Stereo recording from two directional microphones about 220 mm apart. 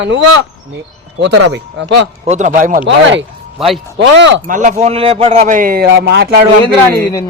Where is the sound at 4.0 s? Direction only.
55° right (ahead or behind).